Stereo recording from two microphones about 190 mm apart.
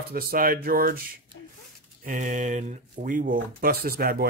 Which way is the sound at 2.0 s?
40° right (ahead or behind).